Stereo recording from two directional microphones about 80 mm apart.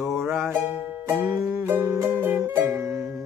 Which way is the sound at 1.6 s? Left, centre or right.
Right.